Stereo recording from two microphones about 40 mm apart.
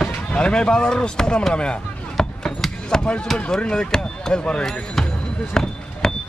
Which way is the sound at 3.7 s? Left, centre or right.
Left.